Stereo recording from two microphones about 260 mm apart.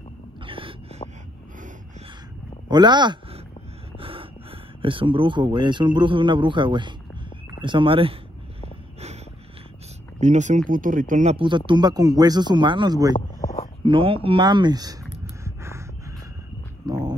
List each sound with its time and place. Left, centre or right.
0.4 s wheeze: centre
2.7 s speech: centre
10.2 s speech: right
15.4 s a sound: centre